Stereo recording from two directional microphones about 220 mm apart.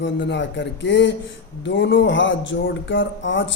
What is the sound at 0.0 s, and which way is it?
Speech, 55° left (ahead or behind).